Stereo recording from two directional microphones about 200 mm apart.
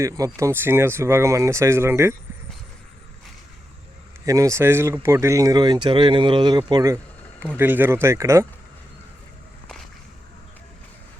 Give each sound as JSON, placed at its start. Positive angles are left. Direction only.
{"t": 0.0, "sound": "speech", "side_deg": -15}
{"t": 4.3, "sound": "speech", "side_deg": -15}